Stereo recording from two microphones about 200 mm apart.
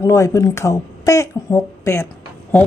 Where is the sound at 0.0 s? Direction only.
15° left (ahead or behind).